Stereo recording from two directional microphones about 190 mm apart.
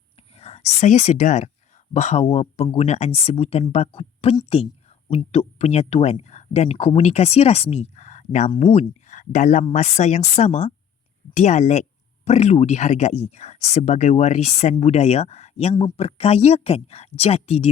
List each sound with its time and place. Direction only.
0.3 s a woman's voice: 35° left (ahead or behind)
8.4 s speech: 30° left (ahead or behind)